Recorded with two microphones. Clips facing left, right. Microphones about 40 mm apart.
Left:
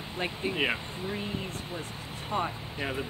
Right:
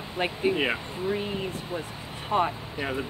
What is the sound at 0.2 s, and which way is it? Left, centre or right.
Speech, right.